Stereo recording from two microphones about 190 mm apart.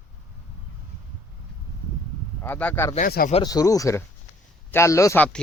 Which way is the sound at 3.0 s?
50° left (ahead or behind).